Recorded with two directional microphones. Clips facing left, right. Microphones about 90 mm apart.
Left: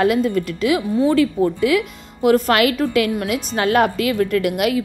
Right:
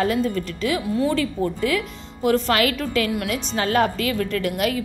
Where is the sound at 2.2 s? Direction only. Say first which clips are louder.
Left 4 dB; 50° left (ahead or behind).